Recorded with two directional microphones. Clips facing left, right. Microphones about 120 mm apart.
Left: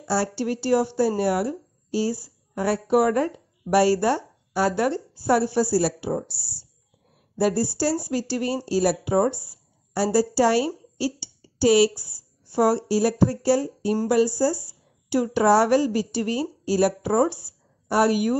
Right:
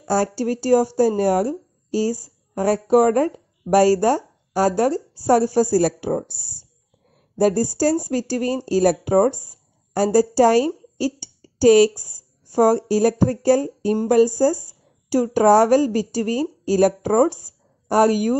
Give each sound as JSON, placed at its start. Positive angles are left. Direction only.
{"t": 0.0, "sound": "a woman's voice", "side_deg": -45}